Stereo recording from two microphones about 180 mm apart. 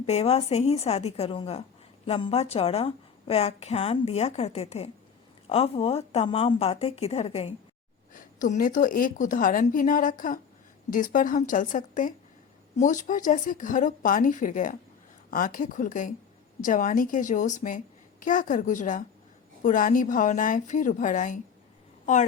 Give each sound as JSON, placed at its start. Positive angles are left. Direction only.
{"t": 0.0, "sound": "a woman's voice", "side_deg": 35}
{"t": 8.1, "sound": "a woman's voice", "side_deg": 45}